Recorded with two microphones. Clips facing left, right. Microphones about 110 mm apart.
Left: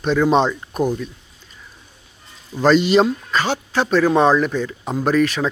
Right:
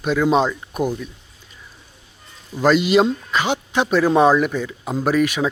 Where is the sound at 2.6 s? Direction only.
5° right (ahead or behind).